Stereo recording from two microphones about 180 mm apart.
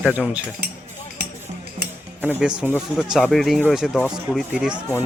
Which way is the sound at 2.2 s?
5° right (ahead or behind).